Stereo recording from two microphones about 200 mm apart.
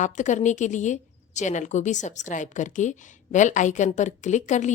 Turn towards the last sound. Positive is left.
turn(degrees=35)  # may be behind; listen again after turning